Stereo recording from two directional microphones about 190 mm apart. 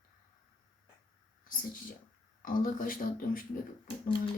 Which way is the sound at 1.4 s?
45° left (ahead or behind).